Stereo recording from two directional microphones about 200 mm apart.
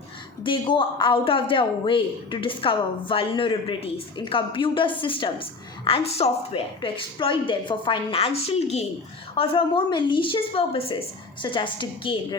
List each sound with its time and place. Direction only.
0.4 s a man's voice: 25° left (ahead or behind)